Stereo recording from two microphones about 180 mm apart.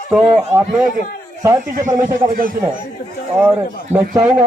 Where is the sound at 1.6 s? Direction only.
45° right (ahead or behind).